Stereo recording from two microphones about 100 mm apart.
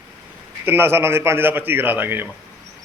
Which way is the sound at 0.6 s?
20° right (ahead or behind).